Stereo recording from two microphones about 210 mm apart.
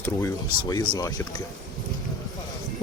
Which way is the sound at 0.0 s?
15° left (ahead or behind).